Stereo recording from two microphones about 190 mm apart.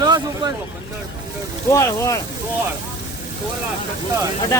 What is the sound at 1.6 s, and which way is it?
Speech, 15° left (ahead or behind).